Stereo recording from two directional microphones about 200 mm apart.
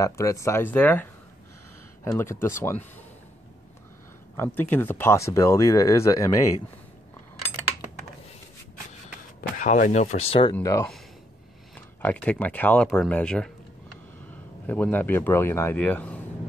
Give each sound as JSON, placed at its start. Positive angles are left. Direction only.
{"t": 0.0, "sound": "speech", "side_deg": 15}
{"t": 2.0, "sound": "speech", "side_deg": 15}
{"t": 4.4, "sound": "speech", "side_deg": 10}
{"t": 9.6, "sound": "speech", "side_deg": 40}
{"t": 10.5, "sound": "speech", "side_deg": 15}
{"t": 12.0, "sound": "speech", "side_deg": 5}
{"t": 14.7, "sound": "speech", "side_deg": 10}